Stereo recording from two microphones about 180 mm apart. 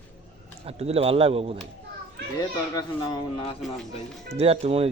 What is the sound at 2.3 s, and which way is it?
Speech, 20° left (ahead or behind).